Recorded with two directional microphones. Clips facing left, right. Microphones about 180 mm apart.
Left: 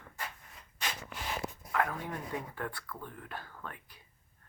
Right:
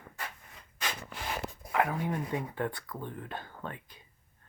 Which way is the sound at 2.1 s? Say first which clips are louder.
Right 5 dB; 20° right (ahead or behind).